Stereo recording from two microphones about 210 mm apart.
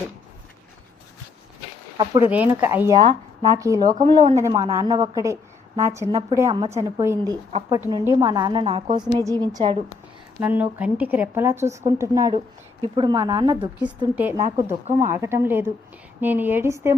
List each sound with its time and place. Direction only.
2.0 s a woman's voice: 20° right (ahead or behind)
3.9 s a woman's voice: 25° right (ahead or behind)
4.4 s a woman's voice: 15° right (ahead or behind)
10.4 s a woman's voice: 5° right (ahead or behind)